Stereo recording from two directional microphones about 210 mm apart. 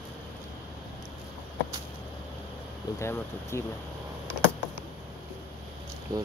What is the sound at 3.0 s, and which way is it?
Speech, 15° left (ahead or behind).